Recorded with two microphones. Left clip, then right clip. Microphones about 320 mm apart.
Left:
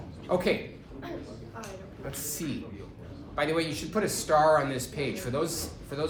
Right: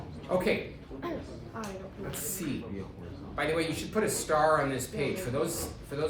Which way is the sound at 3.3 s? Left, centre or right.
Centre.